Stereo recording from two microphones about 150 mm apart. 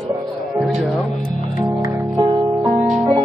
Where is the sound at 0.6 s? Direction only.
Centre (ahead or behind).